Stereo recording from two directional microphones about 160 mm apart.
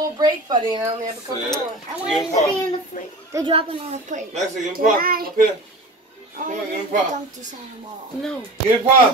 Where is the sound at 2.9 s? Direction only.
60° left (ahead or behind).